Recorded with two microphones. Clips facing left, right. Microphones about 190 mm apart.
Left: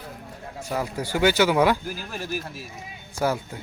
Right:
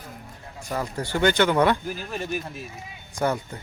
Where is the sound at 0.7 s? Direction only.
10° left (ahead or behind).